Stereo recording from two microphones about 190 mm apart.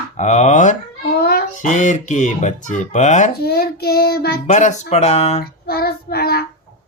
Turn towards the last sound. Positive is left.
turn(degrees=55)  # may be behind; listen again after turning